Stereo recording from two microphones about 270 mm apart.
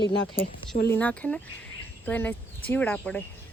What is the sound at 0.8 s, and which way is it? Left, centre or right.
Speech, centre.